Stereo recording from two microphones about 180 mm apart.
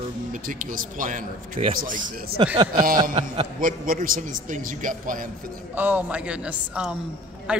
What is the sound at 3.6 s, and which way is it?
A man's voice, 50° right (ahead or behind).